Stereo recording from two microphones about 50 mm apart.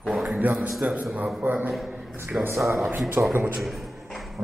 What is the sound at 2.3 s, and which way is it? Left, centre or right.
Speech, right.